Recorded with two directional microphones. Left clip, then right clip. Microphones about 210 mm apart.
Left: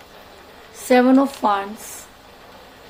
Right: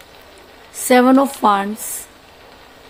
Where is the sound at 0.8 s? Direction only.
45° right (ahead or behind).